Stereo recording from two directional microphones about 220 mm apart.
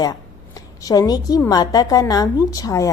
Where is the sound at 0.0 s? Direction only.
15° left (ahead or behind).